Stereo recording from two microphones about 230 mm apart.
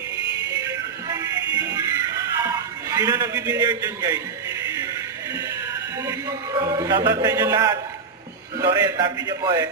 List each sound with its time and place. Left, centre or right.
0.6 s music: centre
6.1 s a man's voice: centre